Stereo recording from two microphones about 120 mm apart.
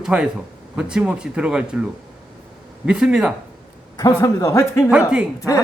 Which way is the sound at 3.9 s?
30° left (ahead or behind).